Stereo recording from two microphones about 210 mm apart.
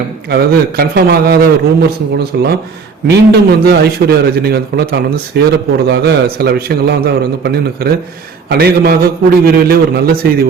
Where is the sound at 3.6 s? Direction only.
50° right (ahead or behind).